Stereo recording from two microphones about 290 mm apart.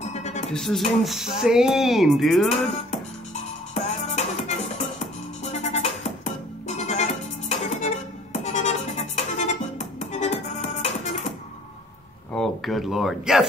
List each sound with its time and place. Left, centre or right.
0.0 s music: left
0.5 s speech: centre
3.7 s music: left
12.4 s speech: centre